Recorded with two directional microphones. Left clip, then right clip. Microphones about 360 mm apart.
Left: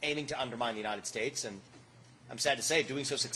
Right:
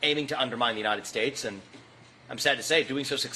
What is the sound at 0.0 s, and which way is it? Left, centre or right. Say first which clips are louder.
Speech: right 8 dB; left.